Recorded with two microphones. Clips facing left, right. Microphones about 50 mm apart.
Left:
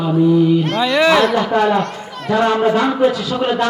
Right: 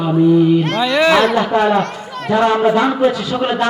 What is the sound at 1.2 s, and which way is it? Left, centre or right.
A man's voice, right.